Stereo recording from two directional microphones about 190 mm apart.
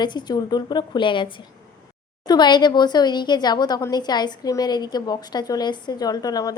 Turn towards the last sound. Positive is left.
turn(degrees=20)  # may be behind; listen again after turning